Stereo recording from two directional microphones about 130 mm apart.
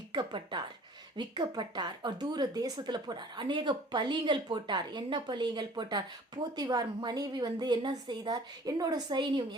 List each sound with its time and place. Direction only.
0.1 s speech: 35° right (ahead or behind)